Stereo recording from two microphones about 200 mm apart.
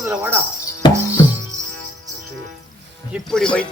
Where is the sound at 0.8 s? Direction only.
20° left (ahead or behind).